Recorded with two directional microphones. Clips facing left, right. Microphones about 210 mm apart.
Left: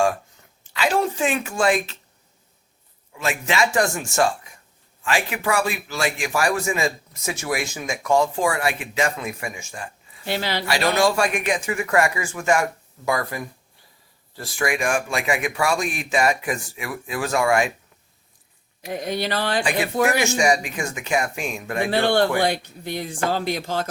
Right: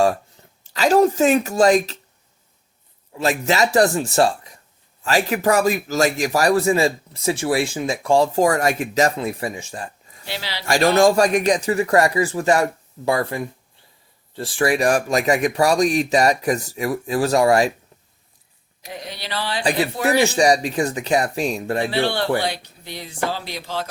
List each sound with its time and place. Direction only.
0.0 s speech: 35° right (ahead or behind)
3.1 s a man's voice: 35° right (ahead or behind)
10.2 s speech: 50° left (ahead or behind)
10.7 s a man's voice: 45° right (ahead or behind)
18.9 s speech: 50° left (ahead or behind)
19.6 s a man's voice: 35° right (ahead or behind)
21.8 s speech: 50° left (ahead or behind)